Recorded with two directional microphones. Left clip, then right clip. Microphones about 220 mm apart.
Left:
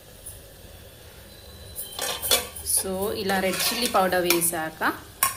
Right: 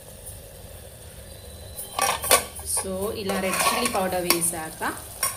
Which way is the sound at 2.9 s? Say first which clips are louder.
Left 2 dB; centre (ahead or behind).